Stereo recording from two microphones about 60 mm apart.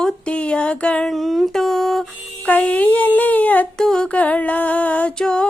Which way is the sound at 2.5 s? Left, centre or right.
Left.